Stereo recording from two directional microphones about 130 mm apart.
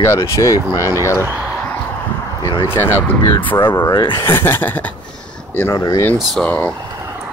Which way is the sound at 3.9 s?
35° left (ahead or behind).